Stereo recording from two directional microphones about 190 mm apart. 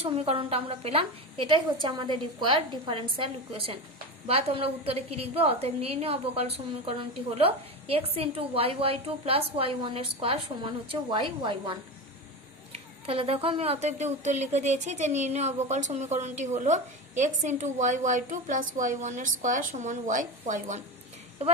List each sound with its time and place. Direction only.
0.0 s a woman's voice: 30° right (ahead or behind)